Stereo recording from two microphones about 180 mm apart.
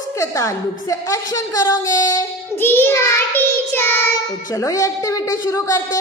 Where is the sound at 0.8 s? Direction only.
20° left (ahead or behind).